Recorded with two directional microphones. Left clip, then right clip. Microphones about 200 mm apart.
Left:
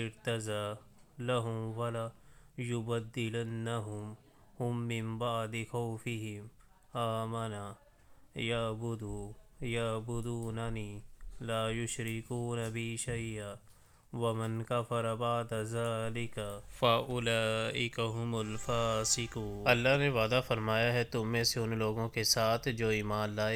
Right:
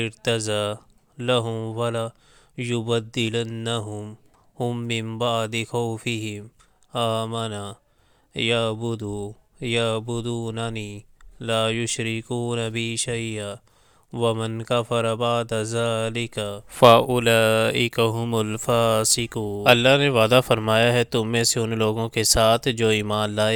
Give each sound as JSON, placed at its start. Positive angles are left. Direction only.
{"t": 0.0, "sound": "speech", "side_deg": -40}
{"t": 1.7, "sound": "speech", "side_deg": -45}
{"t": 3.8, "sound": "speech", "side_deg": -25}